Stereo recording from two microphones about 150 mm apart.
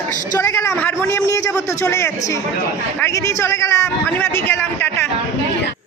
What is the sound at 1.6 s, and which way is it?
A man's voice, 20° left (ahead or behind).